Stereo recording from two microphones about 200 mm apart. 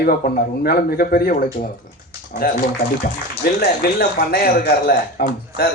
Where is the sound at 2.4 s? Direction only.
50° left (ahead or behind).